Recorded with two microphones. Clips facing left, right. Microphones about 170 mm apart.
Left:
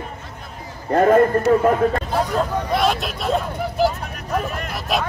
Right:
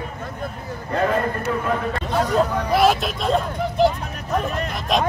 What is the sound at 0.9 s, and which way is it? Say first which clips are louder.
Speech: left 7 dB; 50° left (ahead or behind).